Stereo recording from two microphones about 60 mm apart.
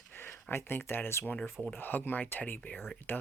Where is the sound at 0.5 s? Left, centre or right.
Left.